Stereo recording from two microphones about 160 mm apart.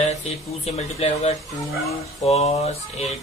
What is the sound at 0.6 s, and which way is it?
Speech, 40° left (ahead or behind).